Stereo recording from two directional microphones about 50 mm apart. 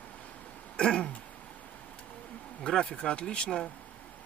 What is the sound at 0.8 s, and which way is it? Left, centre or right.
Speech, left.